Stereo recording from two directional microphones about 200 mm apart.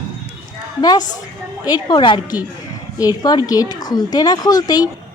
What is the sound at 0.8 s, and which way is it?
A woman's voice, 20° left (ahead or behind).